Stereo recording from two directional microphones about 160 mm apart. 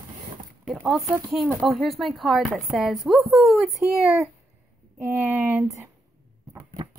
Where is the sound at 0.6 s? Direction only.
5° right (ahead or behind).